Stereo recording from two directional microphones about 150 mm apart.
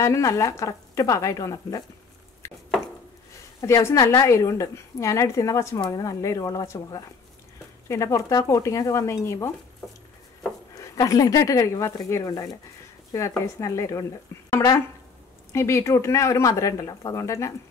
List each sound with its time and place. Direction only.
0.0 s a woman's voice: 20° left (ahead or behind)
2.4 s a sound: 20° left (ahead or behind)
3.6 s a woman's voice: 20° left (ahead or behind)
10.7 s a woman's voice: 25° left (ahead or behind)
13.6 s a woman's voice: 20° left (ahead or behind)
14.3 s a sound: 20° left (ahead or behind)
15.5 s a woman's voice: 20° left (ahead or behind)